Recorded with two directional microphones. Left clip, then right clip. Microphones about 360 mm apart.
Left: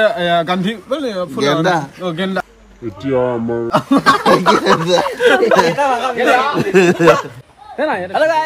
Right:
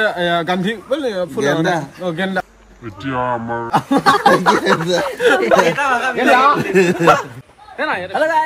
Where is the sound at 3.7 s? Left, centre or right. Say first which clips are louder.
Left 1 dB; centre.